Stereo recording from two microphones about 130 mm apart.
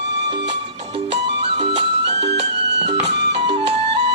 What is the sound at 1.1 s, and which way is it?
Music, 55° right (ahead or behind).